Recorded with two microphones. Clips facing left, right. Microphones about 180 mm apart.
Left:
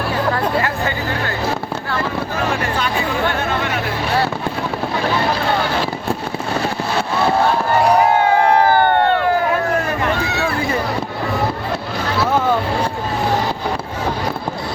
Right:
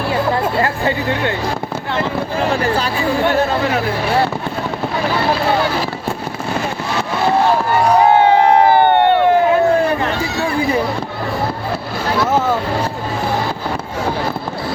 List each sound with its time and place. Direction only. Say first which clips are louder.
0.6 s speech: right 3 dB; 30° right (ahead or behind)
2.5 s hubbub: right 3 dB; 35° right (ahead or behind)
7.9 s crowd: right 3 dB; 25° right (ahead or behind)